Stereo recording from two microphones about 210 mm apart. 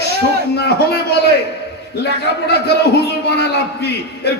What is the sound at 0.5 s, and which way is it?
A man's voice, 50° left (ahead or behind).